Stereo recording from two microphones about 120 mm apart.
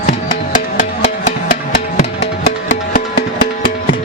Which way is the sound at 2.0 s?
80° left.